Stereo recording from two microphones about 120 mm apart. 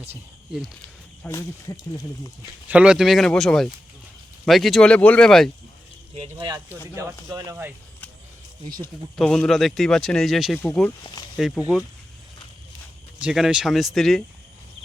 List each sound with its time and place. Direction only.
1.3 s speech: 25° left (ahead or behind)
2.6 s speech: 10° right (ahead or behind)
6.9 s speech: 25° right (ahead or behind)
9.1 s speech: 5° left (ahead or behind)
13.2 s speech: 5° right (ahead or behind)